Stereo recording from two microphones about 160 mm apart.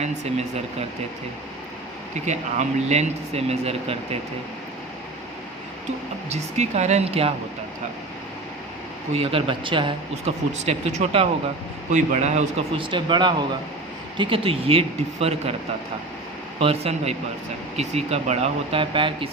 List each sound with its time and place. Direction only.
0.0 s speech: 40° right (ahead or behind)
2.2 s speech: 45° right (ahead or behind)
6.3 s speech: 45° right (ahead or behind)
9.1 s speech: 35° right (ahead or behind)
16.6 s speech: 40° right (ahead or behind)